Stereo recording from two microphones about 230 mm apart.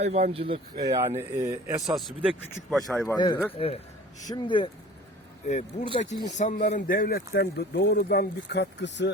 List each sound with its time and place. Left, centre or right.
0.0 s speech: right
1.9 s speech: centre
3.2 s speech: centre
5.9 s speech: left